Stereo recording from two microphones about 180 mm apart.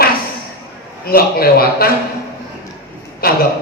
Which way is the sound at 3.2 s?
55° left (ahead or behind).